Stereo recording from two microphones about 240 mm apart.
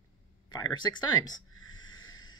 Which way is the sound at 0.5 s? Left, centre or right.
Centre.